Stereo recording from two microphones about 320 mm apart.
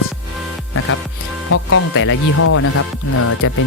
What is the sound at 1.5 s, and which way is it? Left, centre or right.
Speech, left.